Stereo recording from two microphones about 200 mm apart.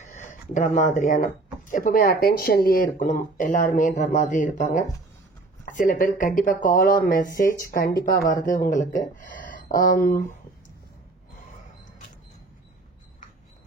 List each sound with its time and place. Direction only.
0.0 s speech: 35° left (ahead or behind)
8.5 s speech: 40° left (ahead or behind)